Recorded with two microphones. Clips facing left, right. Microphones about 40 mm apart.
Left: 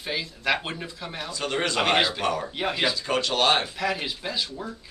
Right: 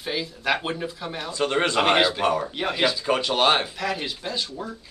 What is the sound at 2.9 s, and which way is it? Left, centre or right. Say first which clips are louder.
Speech: right 2 dB; centre.